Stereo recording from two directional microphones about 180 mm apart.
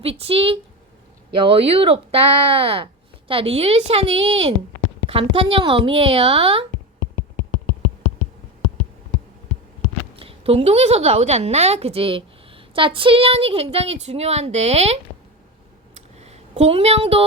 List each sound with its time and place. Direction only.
0.0 s a woman's voice: 35° right (ahead or behind)
10.2 s a woman's voice: 30° right (ahead or behind)
16.0 s a sound: 35° right (ahead or behind)